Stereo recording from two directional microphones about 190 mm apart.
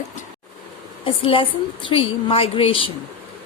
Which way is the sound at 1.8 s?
30° left (ahead or behind).